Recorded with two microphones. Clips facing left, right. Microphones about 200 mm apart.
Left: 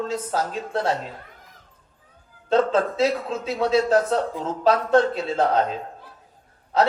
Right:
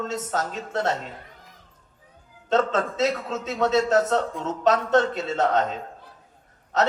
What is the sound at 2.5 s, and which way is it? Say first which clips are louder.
A man's voice: left 3 dB; 35° left (ahead or behind).